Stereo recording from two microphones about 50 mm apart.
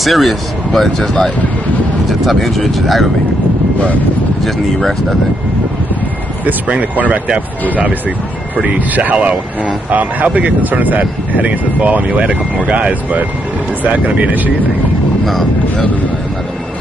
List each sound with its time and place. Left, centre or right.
0.0 s speech: centre
2.0 s speech: centre
6.4 s speech: right
8.5 s speech: right